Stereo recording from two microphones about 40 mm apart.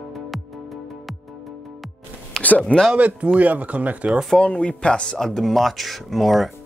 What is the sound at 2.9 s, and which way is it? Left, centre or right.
Speech, right.